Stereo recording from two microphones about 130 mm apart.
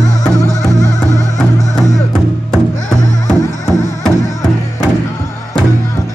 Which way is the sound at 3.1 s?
30° left (ahead or behind).